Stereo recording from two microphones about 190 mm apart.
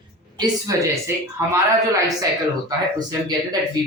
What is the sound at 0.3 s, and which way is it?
A woman's voice, 20° right (ahead or behind).